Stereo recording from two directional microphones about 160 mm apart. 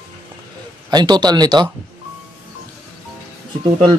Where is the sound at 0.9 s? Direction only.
25° right (ahead or behind).